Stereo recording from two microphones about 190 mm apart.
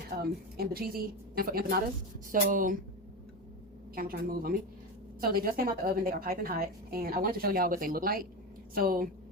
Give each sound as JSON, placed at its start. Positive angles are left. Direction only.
{"t": 0.2, "sound": "a woman's voice", "side_deg": -55}
{"t": 3.9, "sound": "a woman's voice", "side_deg": -50}